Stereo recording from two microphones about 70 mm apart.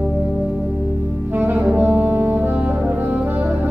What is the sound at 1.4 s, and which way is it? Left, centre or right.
Saxophone, right.